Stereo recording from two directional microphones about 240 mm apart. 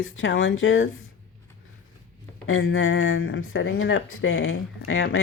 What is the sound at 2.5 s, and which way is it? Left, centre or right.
Speech, left.